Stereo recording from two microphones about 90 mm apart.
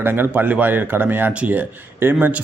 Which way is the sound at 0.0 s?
25° right (ahead or behind).